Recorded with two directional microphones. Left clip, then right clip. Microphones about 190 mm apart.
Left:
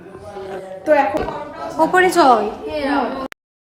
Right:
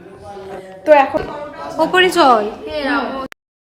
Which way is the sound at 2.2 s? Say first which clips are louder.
Right 1 dB; 10° right (ahead or behind).